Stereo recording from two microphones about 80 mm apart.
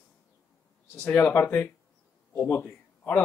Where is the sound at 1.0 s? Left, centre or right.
Left.